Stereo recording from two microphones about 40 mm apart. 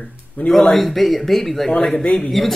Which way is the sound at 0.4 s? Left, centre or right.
Left.